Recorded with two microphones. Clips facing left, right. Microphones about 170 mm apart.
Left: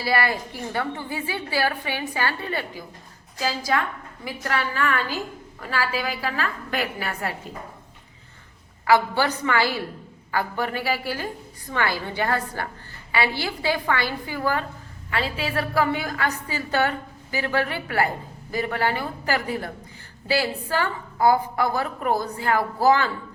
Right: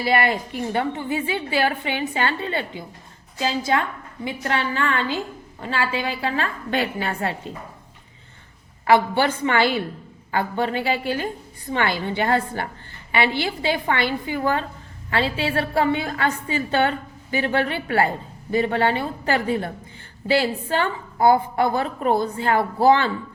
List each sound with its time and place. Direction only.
0.0 s a woman's voice: 20° right (ahead or behind)
8.8 s a woman's voice: 25° right (ahead or behind)